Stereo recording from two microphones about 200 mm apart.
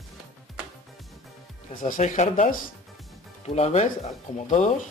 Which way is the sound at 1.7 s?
40° left (ahead or behind).